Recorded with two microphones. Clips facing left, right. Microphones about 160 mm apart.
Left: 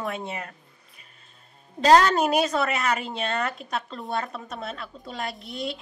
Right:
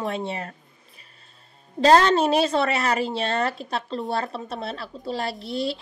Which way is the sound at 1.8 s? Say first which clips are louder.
Right 1 dB; 30° right (ahead or behind).